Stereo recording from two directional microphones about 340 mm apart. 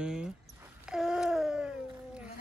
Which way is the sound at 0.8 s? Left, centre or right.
Centre.